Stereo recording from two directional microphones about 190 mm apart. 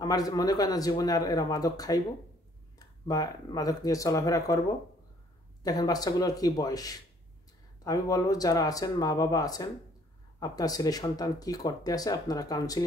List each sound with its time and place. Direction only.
0.0 s speech: 20° left (ahead or behind)
3.1 s speech: 20° left (ahead or behind)
5.6 s speech: 20° left (ahead or behind)